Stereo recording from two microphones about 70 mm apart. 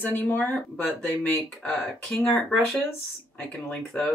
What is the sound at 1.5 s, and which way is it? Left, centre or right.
Speech, centre.